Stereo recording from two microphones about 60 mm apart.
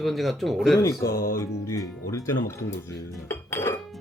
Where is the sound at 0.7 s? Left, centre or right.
Left.